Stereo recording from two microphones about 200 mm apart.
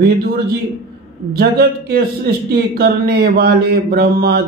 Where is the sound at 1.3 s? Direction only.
50° right (ahead or behind).